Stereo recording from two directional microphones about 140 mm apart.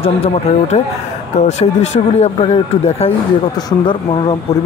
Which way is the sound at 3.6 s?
35° left (ahead or behind).